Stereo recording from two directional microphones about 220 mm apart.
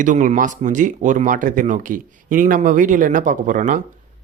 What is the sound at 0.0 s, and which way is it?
Speech, 35° right (ahead or behind).